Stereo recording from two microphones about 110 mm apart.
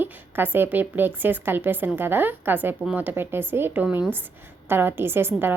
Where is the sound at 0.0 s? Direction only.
20° right (ahead or behind).